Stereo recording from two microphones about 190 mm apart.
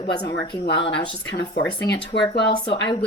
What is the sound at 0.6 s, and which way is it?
Speech, 65° left (ahead or behind).